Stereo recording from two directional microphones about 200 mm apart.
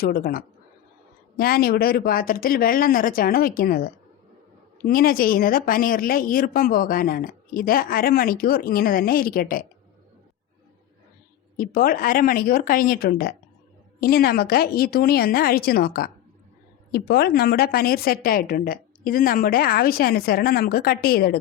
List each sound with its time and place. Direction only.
0.0 s a woman's voice: 50° left (ahead or behind)
4.9 s a woman's voice: 45° left (ahead or behind)
11.5 s a woman's voice: 45° left (ahead or behind)